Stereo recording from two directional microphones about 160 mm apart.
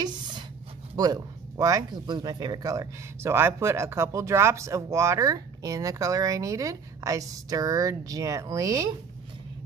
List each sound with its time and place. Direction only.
0.9 s speech: 25° right (ahead or behind)